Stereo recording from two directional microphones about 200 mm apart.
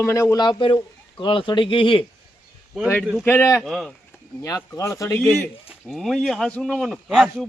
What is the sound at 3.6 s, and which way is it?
Speech, centre (ahead or behind).